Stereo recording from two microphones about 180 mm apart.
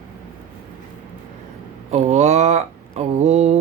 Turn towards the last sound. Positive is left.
turn(degrees=-40)  # may be behind; listen again after turning